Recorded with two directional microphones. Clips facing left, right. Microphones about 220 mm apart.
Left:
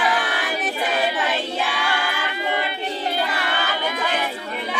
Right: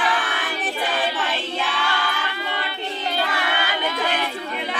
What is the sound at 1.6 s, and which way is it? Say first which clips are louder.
Crowd: left 1 dB; 10° left (ahead or behind).